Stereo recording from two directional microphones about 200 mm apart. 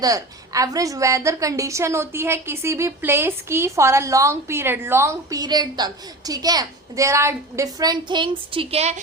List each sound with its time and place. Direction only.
0.0 s a woman's voice: 15° right (ahead or behind)